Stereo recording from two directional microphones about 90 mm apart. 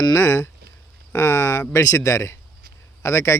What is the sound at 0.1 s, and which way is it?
A man's voice, 30° left (ahead or behind).